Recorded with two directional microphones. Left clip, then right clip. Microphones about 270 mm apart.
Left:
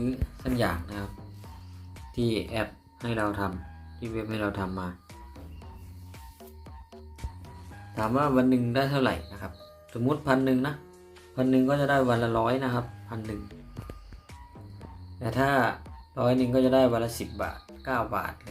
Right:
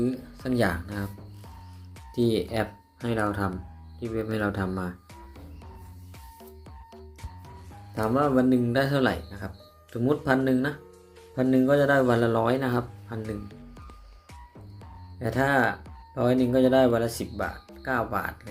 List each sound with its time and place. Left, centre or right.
0.4 s a man's voice: centre
2.1 s a man's voice: centre
6.7 s music: centre
7.9 s a man's voice: centre
15.2 s a man's voice: centre